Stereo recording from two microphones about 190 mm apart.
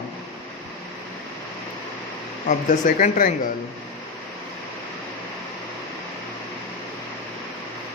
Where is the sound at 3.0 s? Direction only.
45° left (ahead or behind).